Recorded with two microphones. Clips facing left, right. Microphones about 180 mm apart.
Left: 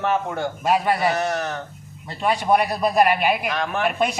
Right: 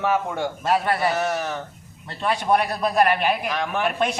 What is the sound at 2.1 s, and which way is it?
A man's voice, 10° left (ahead or behind).